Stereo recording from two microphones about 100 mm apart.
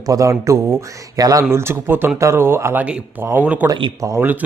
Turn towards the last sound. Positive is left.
turn(degrees=-20)  # may be behind; listen again after turning